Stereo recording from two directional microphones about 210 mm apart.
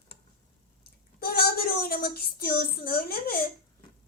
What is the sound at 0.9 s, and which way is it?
Speech, 50° left (ahead or behind).